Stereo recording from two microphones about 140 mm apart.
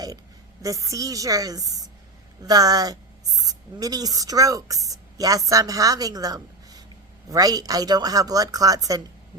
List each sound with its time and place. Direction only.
0.6 s a woman's voice: 25° right (ahead or behind)